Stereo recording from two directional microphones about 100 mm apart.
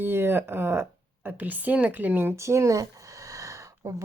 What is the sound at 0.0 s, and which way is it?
Speech, 20° right (ahead or behind).